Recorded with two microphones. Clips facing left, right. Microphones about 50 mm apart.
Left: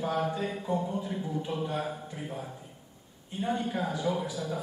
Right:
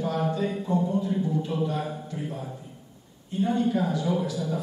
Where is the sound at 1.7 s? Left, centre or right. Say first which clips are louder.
Right 3 dB; centre.